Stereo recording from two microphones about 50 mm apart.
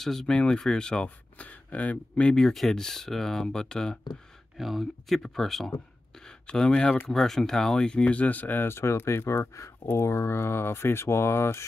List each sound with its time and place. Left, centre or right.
0.0 s speech: centre
2.4 s speech: centre
4.6 s speech: centre
6.2 s a sound: centre
6.7 s speech: centre; by 8.6 s left
8.6 s speech: left